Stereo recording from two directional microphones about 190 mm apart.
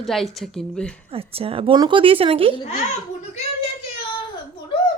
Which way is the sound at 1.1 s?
30° right (ahead or behind).